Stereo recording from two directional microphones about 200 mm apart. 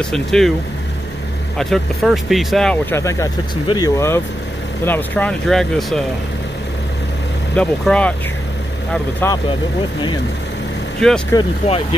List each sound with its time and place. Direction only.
0.0 s speech: centre (ahead or behind)
1.6 s speech: centre (ahead or behind)
7.5 s speech: 5° left (ahead or behind)
9.2 s speech: 10° left (ahead or behind)
11.0 s speech: centre (ahead or behind)
11.3 s speech: 30° left (ahead or behind)